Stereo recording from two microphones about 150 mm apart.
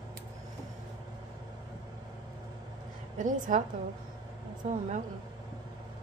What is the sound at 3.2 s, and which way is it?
Speech, 60° right (ahead or behind).